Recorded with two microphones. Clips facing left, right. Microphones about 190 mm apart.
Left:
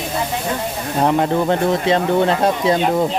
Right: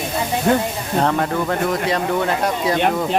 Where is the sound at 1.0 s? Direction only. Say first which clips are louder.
Left 3 dB; 20° left (ahead or behind).